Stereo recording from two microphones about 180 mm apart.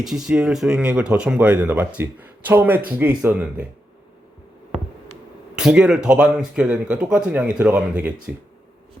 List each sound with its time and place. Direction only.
0.0 s speech: 5° right (ahead or behind)
5.5 s speech: 5° right (ahead or behind)